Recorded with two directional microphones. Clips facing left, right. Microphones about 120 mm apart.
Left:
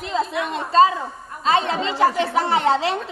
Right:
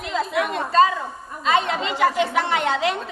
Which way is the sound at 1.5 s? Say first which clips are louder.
Left 1 dB; 35° left (ahead or behind).